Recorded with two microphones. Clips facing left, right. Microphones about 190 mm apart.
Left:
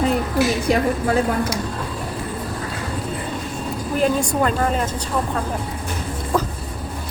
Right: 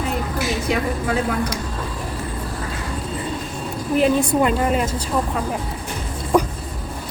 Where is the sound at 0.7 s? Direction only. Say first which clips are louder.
Left 3 dB; 40° left (ahead or behind).